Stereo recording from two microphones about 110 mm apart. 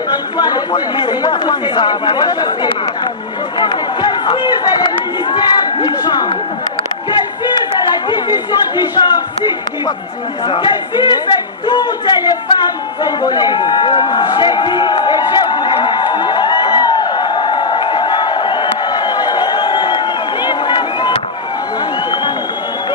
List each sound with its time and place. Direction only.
0.3 s speech: 40° left (ahead or behind)
7.1 s chatter: 40° left (ahead or behind)
10.4 s speech: 45° left (ahead or behind)
13.0 s run: 40° left (ahead or behind)